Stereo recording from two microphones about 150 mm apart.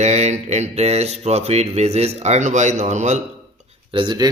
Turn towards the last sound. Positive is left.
turn(degrees=-30)  # may be behind; listen again after turning